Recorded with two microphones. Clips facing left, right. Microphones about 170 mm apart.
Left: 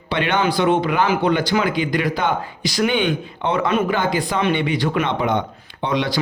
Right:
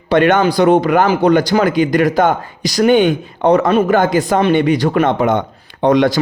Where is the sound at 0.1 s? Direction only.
45° right (ahead or behind).